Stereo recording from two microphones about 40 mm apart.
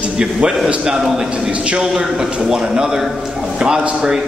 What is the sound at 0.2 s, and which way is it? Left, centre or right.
A man's voice, centre.